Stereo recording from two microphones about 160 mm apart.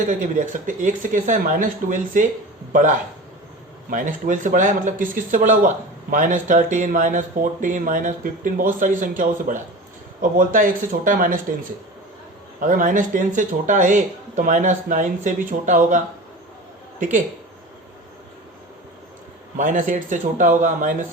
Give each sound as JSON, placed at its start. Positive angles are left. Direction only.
{"t": 0.0, "sound": "speech", "side_deg": -50}
{"t": 12.5, "sound": "speech", "side_deg": -55}
{"t": 17.0, "sound": "speech", "side_deg": -50}
{"t": 19.5, "sound": "speech", "side_deg": -55}